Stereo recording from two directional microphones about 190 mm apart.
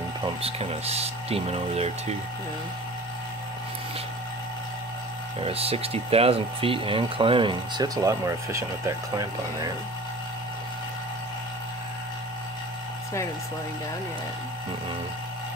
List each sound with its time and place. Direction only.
0.2 s speech: 30° right (ahead or behind)
5.4 s speech: 30° right (ahead or behind)